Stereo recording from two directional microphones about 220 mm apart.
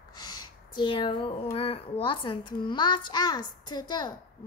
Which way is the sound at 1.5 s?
25° left (ahead or behind).